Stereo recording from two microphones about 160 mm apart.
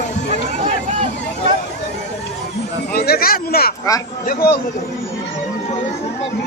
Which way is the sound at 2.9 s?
70° left (ahead or behind).